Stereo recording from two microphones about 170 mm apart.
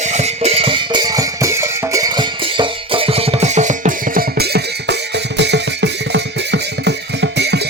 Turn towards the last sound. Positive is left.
turn(degrees=-85)